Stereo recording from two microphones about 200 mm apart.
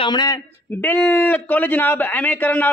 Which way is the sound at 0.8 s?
10° left (ahead or behind).